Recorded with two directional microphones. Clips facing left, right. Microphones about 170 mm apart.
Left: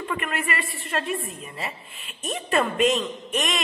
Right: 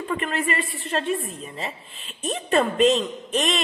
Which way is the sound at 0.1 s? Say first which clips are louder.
Right 4 dB; 30° right (ahead or behind).